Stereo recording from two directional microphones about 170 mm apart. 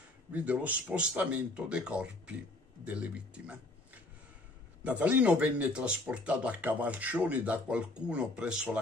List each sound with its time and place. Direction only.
0.3 s a man's voice: 10° right (ahead or behind)